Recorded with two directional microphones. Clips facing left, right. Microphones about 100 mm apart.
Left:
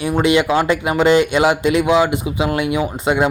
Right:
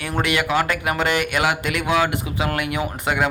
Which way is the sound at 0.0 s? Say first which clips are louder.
Left 7 dB; 20° left (ahead or behind).